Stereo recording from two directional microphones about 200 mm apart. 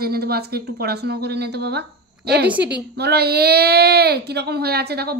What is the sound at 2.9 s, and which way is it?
A woman's voice, 55° right (ahead or behind).